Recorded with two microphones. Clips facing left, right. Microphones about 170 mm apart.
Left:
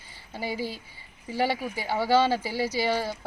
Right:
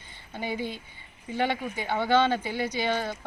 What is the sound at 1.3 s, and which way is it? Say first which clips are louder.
Speech: left 1 dB; 5° left (ahead or behind).